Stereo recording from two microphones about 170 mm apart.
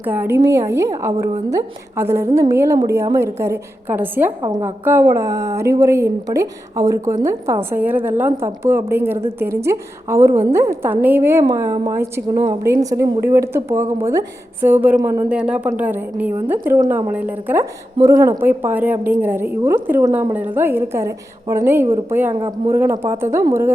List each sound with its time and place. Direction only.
0.0 s a woman's voice: 10° right (ahead or behind)
15.3 s a woman's voice: 5° right (ahead or behind)